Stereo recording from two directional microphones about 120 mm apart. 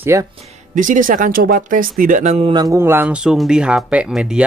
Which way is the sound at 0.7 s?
90° right.